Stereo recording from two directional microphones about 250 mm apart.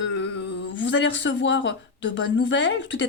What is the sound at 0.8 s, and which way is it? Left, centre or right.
Speech, left.